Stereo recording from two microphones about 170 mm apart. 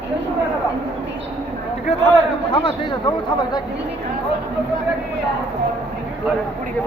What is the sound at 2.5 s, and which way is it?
Speech, 30° left (ahead or behind).